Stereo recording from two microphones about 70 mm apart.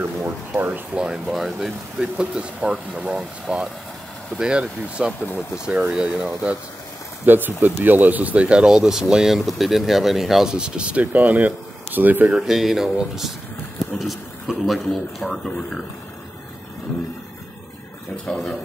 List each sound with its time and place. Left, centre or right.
0.0 s speech: right
1.2 s speech: centre
3.4 s speech: centre
4.4 s speech: centre
7.2 s speech: right
12.3 s speech: centre